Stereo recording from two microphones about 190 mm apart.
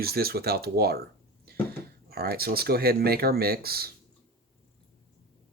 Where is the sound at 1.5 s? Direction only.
55° right (ahead or behind).